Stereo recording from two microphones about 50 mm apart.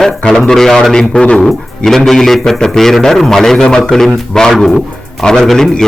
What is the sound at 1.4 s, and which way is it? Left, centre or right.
A man's voice, centre.